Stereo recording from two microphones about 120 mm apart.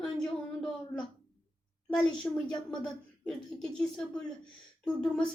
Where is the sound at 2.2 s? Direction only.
5° left (ahead or behind).